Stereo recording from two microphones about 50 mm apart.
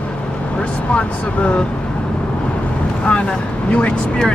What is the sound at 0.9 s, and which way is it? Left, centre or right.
Speech, left.